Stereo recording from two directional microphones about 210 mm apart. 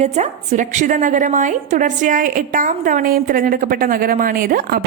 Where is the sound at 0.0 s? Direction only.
30° right (ahead or behind).